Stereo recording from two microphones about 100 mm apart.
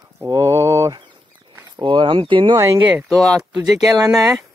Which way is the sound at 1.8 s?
55° right (ahead or behind).